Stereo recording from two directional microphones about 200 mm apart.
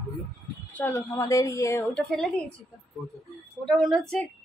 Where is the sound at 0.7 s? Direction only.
15° left (ahead or behind).